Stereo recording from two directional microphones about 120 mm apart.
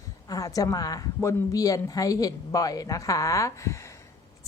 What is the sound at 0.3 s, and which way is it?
A woman's voice, 30° left (ahead or behind).